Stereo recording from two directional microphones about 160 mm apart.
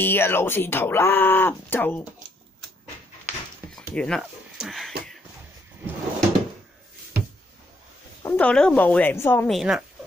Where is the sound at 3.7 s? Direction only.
5° left (ahead or behind).